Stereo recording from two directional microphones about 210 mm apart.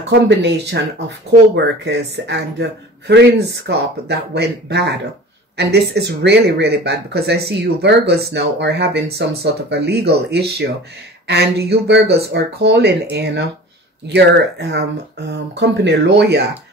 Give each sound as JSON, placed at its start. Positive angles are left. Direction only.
{"t": 0.3, "sound": "speech", "side_deg": -55}